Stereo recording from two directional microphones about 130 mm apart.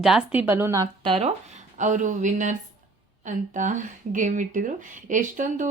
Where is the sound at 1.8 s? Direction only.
70° right (ahead or behind).